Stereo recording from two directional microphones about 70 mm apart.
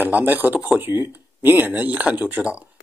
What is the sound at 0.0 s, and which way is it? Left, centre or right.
Speech, right.